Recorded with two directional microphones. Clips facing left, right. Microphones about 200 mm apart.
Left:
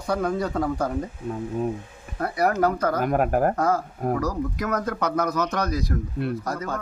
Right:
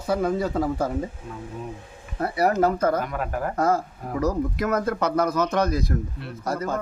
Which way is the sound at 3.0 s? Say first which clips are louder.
Left 7 dB; 50° left (ahead or behind).